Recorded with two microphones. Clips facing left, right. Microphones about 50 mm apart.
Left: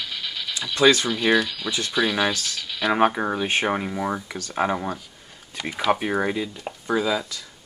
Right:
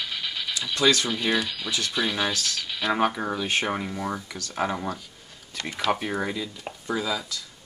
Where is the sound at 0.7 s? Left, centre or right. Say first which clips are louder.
Left 5 dB; left.